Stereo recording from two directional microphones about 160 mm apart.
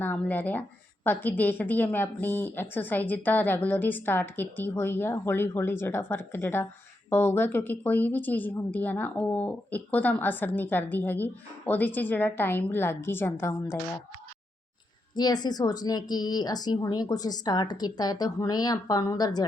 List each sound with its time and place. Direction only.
0.0 s a woman's voice: 10° left (ahead or behind)
15.1 s speech: 25° left (ahead or behind)